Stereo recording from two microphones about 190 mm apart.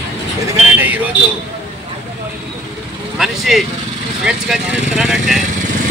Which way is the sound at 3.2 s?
Centre (ahead or behind).